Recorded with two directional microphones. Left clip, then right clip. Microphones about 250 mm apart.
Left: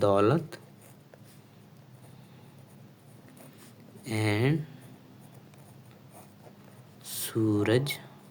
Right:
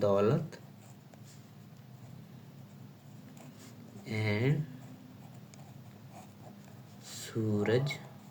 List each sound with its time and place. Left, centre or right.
0.0 s speech: left
4.0 s speech: left
7.1 s speech: left